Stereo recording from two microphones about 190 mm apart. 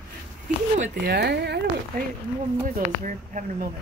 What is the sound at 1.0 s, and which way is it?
Speech, 60° right (ahead or behind).